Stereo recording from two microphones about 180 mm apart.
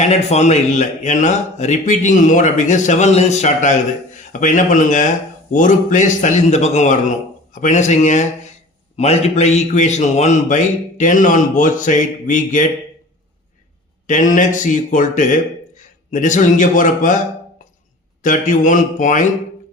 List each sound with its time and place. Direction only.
0.0 s speech: 35° left (ahead or behind)
14.1 s speech: 45° left (ahead or behind)
18.2 s speech: 45° left (ahead or behind)